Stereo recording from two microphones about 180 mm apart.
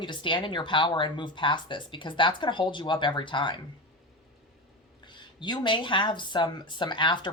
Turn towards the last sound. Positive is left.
turn(degrees=25)  # may be behind; listen again after turning